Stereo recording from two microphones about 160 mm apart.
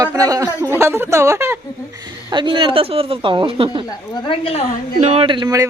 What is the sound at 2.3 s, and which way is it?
Speech, 30° right (ahead or behind).